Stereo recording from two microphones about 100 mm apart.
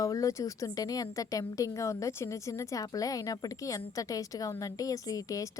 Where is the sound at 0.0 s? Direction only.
35° left (ahead or behind).